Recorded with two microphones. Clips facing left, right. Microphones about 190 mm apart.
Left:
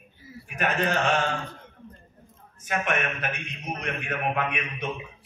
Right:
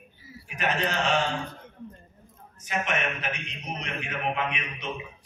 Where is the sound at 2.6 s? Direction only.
55° left (ahead or behind).